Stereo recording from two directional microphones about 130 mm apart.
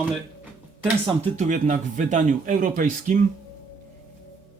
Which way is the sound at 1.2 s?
65° right (ahead or behind).